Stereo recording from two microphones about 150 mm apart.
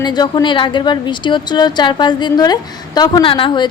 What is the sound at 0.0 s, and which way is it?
A woman's voice, 30° left (ahead or behind).